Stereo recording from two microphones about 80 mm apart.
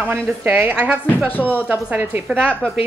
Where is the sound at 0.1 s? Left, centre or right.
Right.